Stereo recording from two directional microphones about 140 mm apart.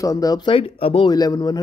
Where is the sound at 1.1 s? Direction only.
30° left (ahead or behind).